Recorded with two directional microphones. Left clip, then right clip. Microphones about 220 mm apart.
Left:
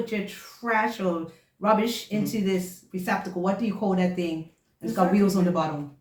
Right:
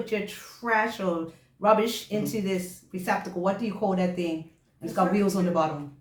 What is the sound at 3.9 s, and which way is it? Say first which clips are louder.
Speech: left 2 dB; 15° right (ahead or behind).